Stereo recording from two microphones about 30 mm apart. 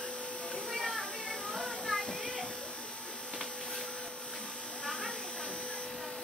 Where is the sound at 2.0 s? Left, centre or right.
Left.